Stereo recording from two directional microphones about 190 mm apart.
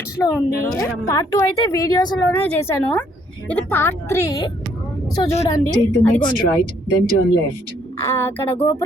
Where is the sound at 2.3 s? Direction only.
10° left (ahead or behind).